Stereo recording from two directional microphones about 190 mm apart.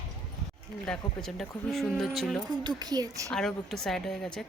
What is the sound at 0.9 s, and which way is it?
A woman's voice, 5° left (ahead or behind).